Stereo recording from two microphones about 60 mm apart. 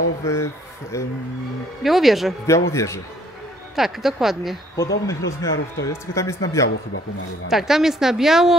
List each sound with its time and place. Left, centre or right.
0.2 s speech: left
1.8 s a woman's voice: centre
2.4 s speech: left
3.7 s a woman's voice: centre
4.7 s speech: left
7.4 s a woman's voice: centre